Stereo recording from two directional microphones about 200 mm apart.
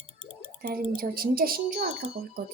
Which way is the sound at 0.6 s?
45° right (ahead or behind).